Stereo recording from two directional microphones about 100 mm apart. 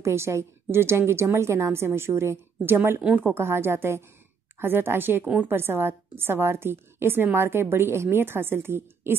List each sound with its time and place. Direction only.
0.0 s a woman's voice: 25° right (ahead or behind)